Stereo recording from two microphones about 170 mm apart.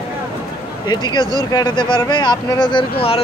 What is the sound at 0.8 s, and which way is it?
Speech, 25° left (ahead or behind).